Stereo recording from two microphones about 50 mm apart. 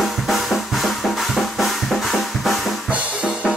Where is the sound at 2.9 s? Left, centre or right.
Right.